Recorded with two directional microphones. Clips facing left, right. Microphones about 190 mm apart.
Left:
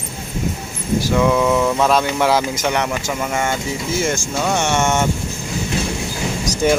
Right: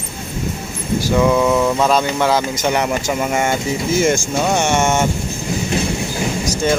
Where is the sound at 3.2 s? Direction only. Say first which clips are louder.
Right 3 dB; 20° right (ahead or behind).